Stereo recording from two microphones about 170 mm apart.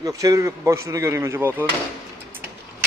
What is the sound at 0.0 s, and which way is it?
Speech, 20° right (ahead or behind).